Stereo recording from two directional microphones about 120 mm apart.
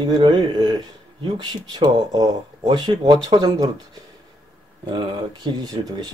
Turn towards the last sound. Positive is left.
turn(degrees=-40)  # may be behind; listen again after turning